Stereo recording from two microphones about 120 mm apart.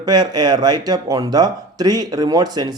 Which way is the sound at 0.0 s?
35° right (ahead or behind).